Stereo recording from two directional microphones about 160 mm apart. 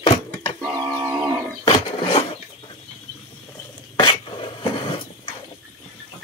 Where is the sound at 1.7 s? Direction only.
35° left (ahead or behind).